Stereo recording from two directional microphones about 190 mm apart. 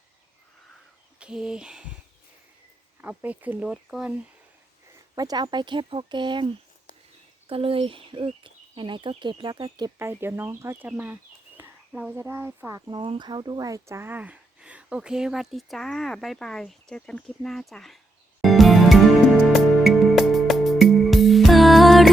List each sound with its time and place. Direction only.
1.2 s a sound: 5° right (ahead or behind)
3.0 s speech: 10° right (ahead or behind)
5.1 s speech: 20° right (ahead or behind); by 18.0 s centre (ahead or behind)
18.4 s music: centre (ahead or behind)